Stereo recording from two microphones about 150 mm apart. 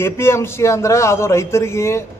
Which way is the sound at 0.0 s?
15° left (ahead or behind).